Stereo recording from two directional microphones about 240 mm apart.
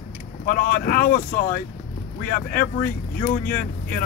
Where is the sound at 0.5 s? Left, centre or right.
Left.